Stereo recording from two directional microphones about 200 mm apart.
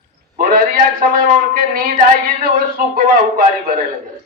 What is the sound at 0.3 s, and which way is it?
A man's voice, 45° right (ahead or behind).